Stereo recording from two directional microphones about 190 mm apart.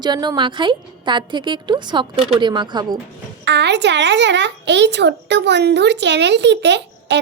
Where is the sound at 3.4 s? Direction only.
65° right (ahead or behind).